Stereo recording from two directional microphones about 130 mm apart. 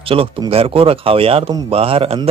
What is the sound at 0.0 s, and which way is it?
Speech, 45° right (ahead or behind).